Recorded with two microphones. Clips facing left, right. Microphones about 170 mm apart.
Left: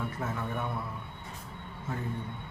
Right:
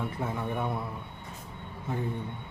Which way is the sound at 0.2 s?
15° right (ahead or behind).